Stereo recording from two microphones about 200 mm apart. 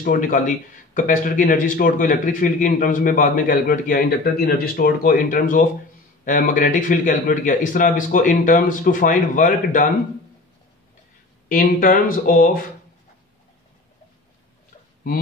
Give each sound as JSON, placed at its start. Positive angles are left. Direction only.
{"t": 0.0, "sound": "a man's voice", "side_deg": 45}
{"t": 11.4, "sound": "a man's voice", "side_deg": 45}